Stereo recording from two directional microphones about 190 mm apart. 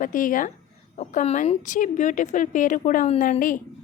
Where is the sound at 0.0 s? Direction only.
45° left (ahead or behind).